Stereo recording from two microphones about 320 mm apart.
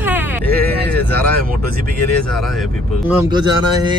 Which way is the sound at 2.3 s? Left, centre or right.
Centre.